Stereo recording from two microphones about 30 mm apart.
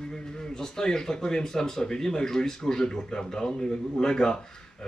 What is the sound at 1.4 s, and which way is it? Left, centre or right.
Speech, centre.